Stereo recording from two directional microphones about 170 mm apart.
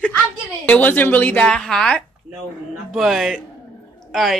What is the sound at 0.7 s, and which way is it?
A woman's voice, 10° left (ahead or behind).